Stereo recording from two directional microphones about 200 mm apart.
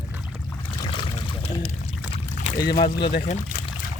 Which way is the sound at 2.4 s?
50° left (ahead or behind).